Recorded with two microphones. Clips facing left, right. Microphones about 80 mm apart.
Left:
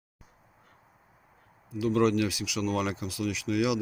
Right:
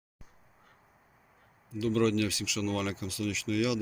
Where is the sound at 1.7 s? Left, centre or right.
Centre.